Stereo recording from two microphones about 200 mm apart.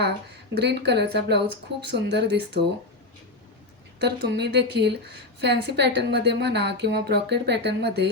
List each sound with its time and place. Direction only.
0.6 s a woman's voice: 55° right (ahead or behind)
4.0 s a woman's voice: 55° right (ahead or behind)